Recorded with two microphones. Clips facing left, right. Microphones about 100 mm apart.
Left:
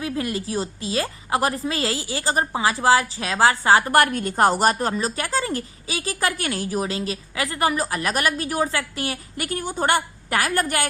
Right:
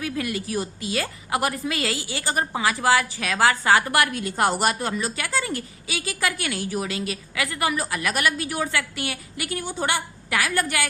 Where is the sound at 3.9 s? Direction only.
45° left (ahead or behind).